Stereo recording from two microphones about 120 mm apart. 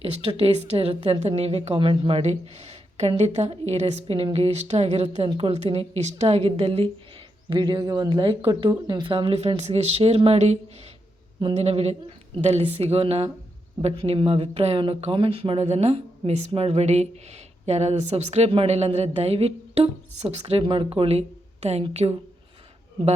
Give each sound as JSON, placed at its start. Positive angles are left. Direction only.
{"t": 0.0, "sound": "speech", "side_deg": -55}
{"t": 4.0, "sound": "a woman's voice", "side_deg": -50}
{"t": 5.9, "sound": "a woman's voice", "side_deg": -65}